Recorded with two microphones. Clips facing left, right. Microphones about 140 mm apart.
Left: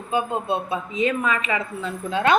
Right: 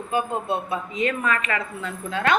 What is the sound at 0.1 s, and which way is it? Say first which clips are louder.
Speech: left 2 dB; 25° left (ahead or behind).